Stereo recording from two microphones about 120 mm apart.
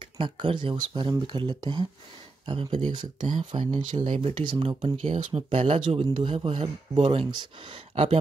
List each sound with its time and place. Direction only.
0.0 s speech: 45° right (ahead or behind)
3.9 s speech: 80° right
4.2 s speech: 50° right (ahead or behind)
7.2 s speech: 45° right (ahead or behind)